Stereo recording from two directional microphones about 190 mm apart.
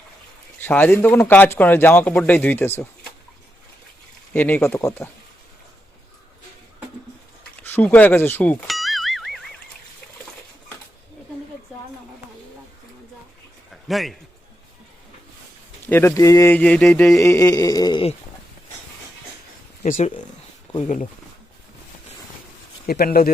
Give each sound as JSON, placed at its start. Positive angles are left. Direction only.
{"t": 0.6, "sound": "speech", "side_deg": 10}
{"t": 4.4, "sound": "speech", "side_deg": 10}
{"t": 7.6, "sound": "music", "side_deg": 10}
{"t": 13.8, "sound": "a man's voice", "side_deg": 0}
{"t": 15.9, "sound": "speech", "side_deg": 15}
{"t": 19.8, "sound": "speech", "side_deg": 40}
{"t": 22.9, "sound": "speech", "side_deg": 55}